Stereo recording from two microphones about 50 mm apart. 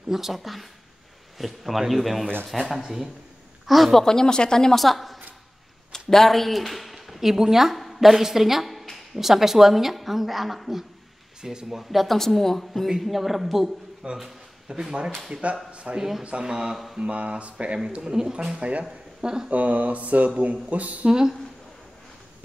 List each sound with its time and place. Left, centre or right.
0.1 s a woman's voice: centre
4.0 s a woman's voice: centre
14.0 s speech: centre
15.3 s speech: right
16.0 s speech: centre
16.7 s mantra: centre
17.0 s speech: right
17.9 s speech: centre
19.2 s speech: centre
19.5 s speech: right
21.1 s speech: centre